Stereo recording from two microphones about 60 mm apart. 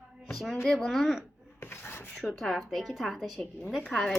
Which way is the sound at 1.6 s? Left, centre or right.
Left.